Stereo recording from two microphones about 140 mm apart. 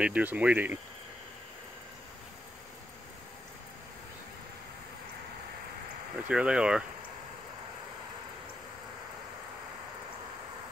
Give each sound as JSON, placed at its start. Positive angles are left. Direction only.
{"t": 0.0, "sound": "speech", "side_deg": -10}
{"t": 6.1, "sound": "speech", "side_deg": -10}